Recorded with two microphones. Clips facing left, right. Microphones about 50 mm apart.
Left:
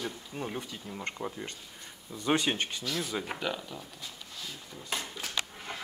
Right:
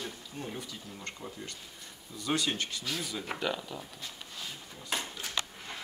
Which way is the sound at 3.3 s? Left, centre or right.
Centre.